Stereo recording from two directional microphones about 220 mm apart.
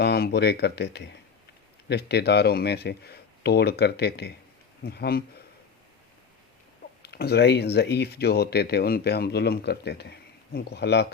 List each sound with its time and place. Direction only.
0.0 s speech: 45° left (ahead or behind)
7.0 s speech: 45° left (ahead or behind)